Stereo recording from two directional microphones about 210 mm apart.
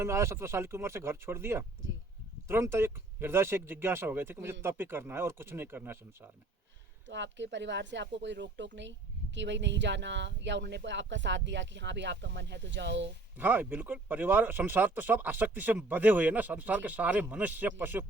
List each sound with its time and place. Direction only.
0.0 s speech: 10° right (ahead or behind)
7.1 s speech: 60° right (ahead or behind)
13.3 s speech: 10° right (ahead or behind)